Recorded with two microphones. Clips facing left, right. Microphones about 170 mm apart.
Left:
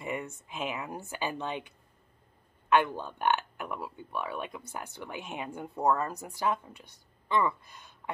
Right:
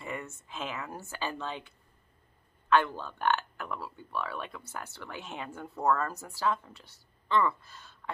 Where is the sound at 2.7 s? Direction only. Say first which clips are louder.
Left 1 dB; 15° left (ahead or behind).